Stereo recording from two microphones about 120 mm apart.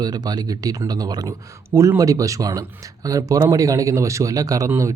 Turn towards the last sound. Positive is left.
turn(degrees=-25)  # may be behind; listen again after turning